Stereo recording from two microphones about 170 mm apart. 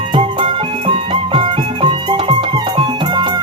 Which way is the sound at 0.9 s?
30° right (ahead or behind).